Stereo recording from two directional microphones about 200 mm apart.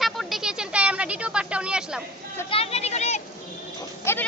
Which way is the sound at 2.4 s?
30° left (ahead or behind).